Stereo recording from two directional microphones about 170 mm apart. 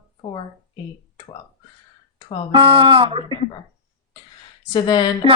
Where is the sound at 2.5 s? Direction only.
30° right (ahead or behind).